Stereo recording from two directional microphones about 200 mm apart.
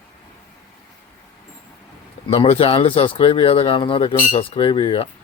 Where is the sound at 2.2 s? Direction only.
30° left (ahead or behind).